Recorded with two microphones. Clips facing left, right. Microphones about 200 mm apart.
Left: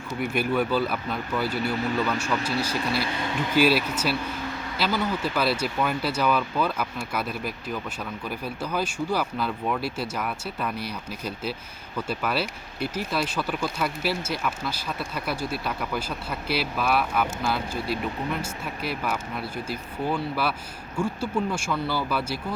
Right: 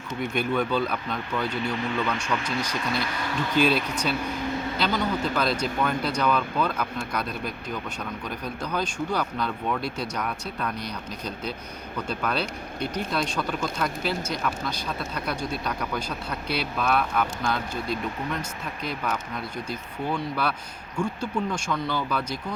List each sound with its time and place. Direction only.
0.1 s speech: 5° left (ahead or behind)